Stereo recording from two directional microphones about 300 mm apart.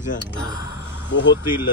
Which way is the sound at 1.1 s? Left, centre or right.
Left.